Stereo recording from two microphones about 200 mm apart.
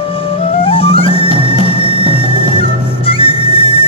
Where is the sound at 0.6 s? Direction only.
25° left (ahead or behind).